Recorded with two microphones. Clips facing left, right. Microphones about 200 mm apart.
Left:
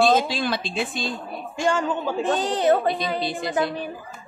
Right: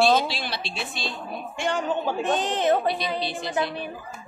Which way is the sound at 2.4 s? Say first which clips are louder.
Left 4 dB; 40° left (ahead or behind).